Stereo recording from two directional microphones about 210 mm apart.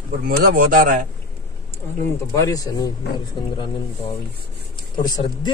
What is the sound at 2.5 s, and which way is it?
Speech, 20° left (ahead or behind).